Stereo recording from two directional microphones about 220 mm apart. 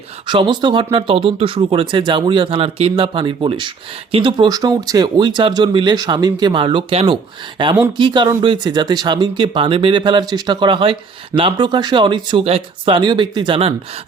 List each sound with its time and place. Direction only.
0.3 s speech: 20° right (ahead or behind)